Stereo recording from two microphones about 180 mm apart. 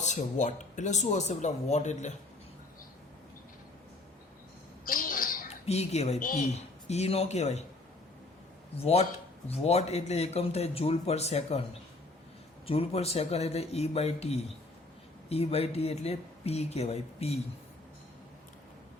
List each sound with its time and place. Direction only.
0.0 s speech: 40° left (ahead or behind)
4.9 s a sound: 50° left (ahead or behind)
5.5 s speech: 35° left (ahead or behind)
8.7 s speech: 35° left (ahead or behind)
12.6 s speech: 35° left (ahead or behind)